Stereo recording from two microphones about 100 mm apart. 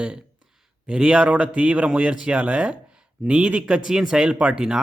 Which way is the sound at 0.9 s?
10° right (ahead or behind).